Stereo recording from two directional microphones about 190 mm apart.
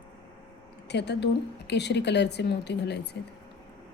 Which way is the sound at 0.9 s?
65° left (ahead or behind).